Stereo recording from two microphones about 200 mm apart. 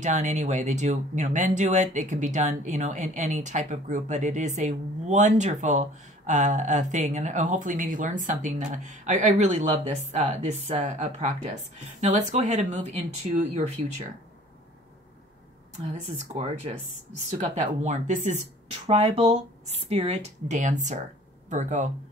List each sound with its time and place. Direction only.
0.0 s speech: 35° right (ahead or behind)
17.6 s speech: 40° right (ahead or behind)